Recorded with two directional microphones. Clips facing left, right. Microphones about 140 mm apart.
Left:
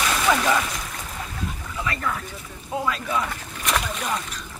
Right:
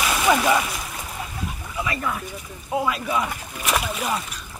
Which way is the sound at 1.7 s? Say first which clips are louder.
Right 1 dB; 10° right (ahead or behind).